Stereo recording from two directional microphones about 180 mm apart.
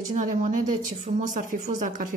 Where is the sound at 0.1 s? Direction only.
40° right (ahead or behind).